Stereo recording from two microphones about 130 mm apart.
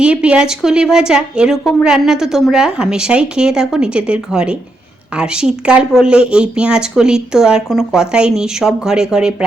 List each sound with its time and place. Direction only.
0.0 s a woman's voice: 10° right (ahead or behind)